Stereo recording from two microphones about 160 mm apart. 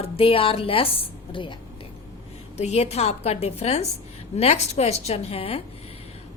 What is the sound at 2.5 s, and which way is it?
A woman's voice, 45° left (ahead or behind).